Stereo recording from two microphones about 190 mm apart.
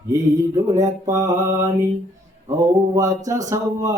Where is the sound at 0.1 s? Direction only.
15° right (ahead or behind).